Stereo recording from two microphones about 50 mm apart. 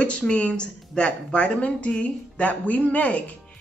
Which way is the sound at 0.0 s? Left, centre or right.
Left.